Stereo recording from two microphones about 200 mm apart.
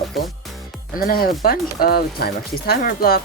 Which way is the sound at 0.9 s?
45° left (ahead or behind).